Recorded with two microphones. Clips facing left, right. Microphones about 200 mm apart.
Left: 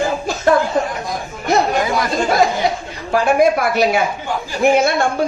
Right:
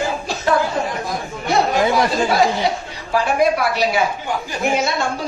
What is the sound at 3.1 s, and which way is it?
A woman's voice, 50° left (ahead or behind).